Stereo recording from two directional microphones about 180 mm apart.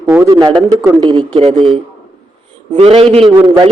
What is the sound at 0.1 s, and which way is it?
Speech, 15° right (ahead or behind).